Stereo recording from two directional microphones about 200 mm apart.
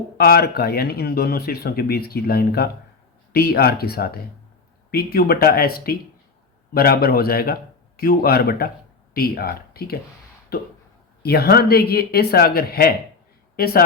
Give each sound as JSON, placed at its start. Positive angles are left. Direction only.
{"t": 0.2, "sound": "speech", "side_deg": 50}